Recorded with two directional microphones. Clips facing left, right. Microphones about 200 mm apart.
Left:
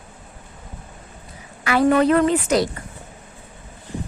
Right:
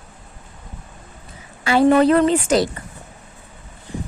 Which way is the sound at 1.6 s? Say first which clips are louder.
Right 3 dB; 30° right (ahead or behind).